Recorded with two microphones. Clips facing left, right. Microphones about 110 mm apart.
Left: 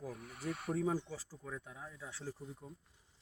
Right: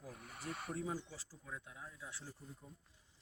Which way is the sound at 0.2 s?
Centre (ahead or behind).